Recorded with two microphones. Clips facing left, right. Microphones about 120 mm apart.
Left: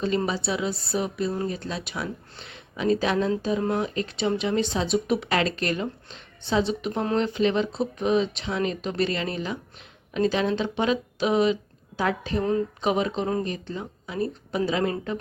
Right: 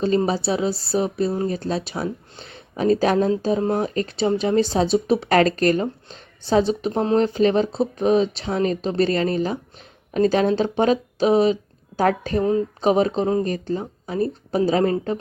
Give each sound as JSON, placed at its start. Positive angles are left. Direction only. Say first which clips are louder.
{"t": 0.3, "sound": "speech", "louder": "right 5 dB", "side_deg": -40}
{"t": 5.3, "sound": "a woman's voice", "louder": "right 8 dB", "side_deg": -45}
{"t": 12.4, "sound": "speech", "louder": "right 4 dB", "side_deg": -25}
{"t": 12.8, "sound": "speech", "louder": "right 6 dB", "side_deg": -40}